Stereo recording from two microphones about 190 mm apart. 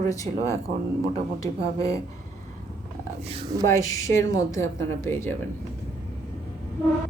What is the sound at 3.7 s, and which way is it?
Speech, 15° left (ahead or behind).